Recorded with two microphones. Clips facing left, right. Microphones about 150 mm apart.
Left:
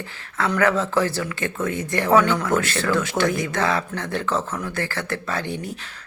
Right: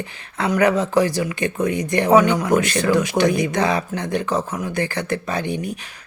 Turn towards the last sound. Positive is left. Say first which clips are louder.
# right 3 dB
turn(degrees=-15)  # may be behind; listen again after turning